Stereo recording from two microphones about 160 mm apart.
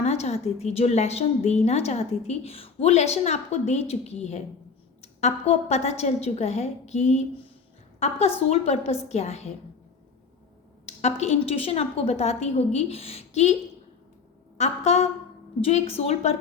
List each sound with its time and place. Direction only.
0.0 s a woman's voice: 40° left (ahead or behind)
10.8 s a woman's voice: 40° left (ahead or behind)
14.6 s a woman's voice: 45° left (ahead or behind)